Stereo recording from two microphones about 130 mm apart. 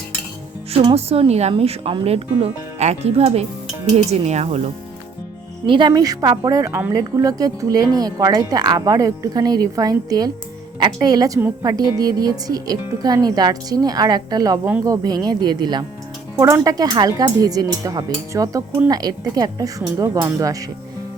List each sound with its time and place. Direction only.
0.9 s speech: 50° right (ahead or behind)
5.6 s speech: 40° right (ahead or behind)
5.9 s speech: 30° right (ahead or behind)